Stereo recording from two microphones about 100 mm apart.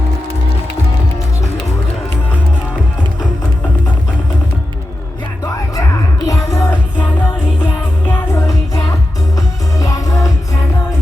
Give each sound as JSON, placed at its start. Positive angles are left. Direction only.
{"t": 6.2, "sound": "music", "side_deg": 35}
{"t": 8.1, "sound": "music", "side_deg": 30}